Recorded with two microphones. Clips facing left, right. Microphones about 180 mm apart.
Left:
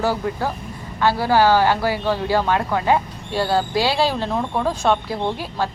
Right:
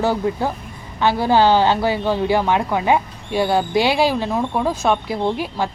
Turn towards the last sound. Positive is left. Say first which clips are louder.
# right 2 dB
turn(degrees=-15)  # may be behind; listen again after turning